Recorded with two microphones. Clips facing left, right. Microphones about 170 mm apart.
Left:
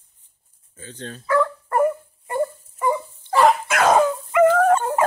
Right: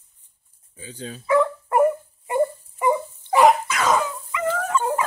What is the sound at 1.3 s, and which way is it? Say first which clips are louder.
Dog: right 1 dB; 15° right (ahead or behind).